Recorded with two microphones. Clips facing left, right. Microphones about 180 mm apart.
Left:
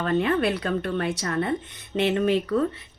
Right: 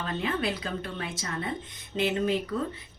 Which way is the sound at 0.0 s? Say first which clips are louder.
Left 8 dB; 65° left (ahead or behind).